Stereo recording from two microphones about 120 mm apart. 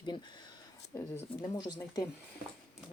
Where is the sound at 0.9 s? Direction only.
20° left (ahead or behind).